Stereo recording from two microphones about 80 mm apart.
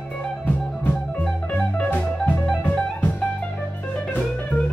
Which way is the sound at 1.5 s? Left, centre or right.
Centre.